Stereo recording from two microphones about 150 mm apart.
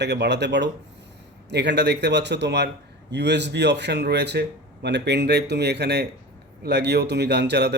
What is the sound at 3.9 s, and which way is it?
Speech, 90° right.